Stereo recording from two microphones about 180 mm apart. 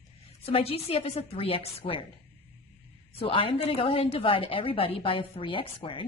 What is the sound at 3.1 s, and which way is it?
A woman's voice, 30° left (ahead or behind).